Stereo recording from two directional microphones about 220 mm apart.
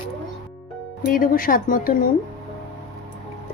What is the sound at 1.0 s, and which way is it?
Speech, 40° left (ahead or behind).